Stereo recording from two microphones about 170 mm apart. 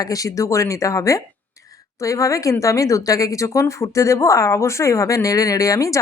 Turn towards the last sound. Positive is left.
turn(degrees=20)  # may be behind; listen again after turning